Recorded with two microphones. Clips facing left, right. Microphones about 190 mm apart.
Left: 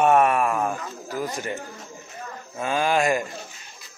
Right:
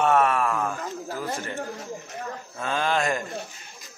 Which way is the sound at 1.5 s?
65° right (ahead or behind).